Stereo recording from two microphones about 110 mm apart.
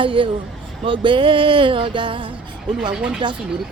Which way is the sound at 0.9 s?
50° right (ahead or behind).